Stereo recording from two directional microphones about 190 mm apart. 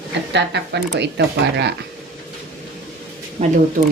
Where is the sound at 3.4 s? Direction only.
40° right (ahead or behind).